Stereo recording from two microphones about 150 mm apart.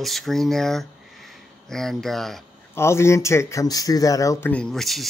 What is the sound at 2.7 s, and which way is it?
Speech, 15° left (ahead or behind).